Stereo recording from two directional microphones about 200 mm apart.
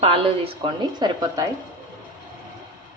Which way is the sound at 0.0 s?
25° right (ahead or behind).